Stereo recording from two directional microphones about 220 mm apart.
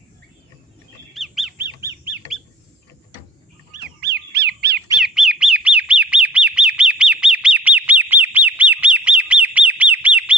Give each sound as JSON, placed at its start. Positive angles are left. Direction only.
{"t": 1.1, "sound": "bird", "side_deg": 0}
{"t": 4.0, "sound": "bird", "side_deg": -50}
{"t": 4.9, "sound": "bird", "side_deg": -5}